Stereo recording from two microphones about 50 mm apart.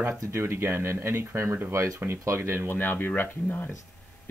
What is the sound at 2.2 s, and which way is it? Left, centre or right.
Speech, right.